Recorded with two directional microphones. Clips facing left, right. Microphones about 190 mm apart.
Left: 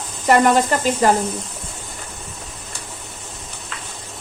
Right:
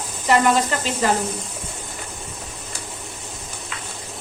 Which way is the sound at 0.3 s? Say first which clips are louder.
Left 3 dB; 45° left (ahead or behind).